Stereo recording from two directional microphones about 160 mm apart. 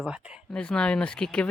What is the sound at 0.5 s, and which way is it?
Speech, 5° left (ahead or behind).